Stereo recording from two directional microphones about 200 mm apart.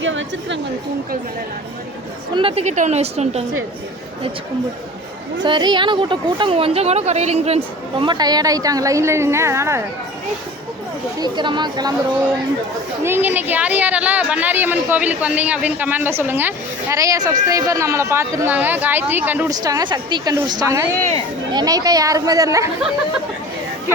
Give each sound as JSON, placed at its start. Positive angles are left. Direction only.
{"t": 0.0, "sound": "a sound", "side_deg": -70}
{"t": 2.3, "sound": "a woman's voice", "side_deg": -25}
{"t": 5.4, "sound": "speech", "side_deg": -20}
{"t": 11.2, "sound": "speech", "side_deg": -20}
{"t": 13.1, "sound": "a woman's voice", "side_deg": -10}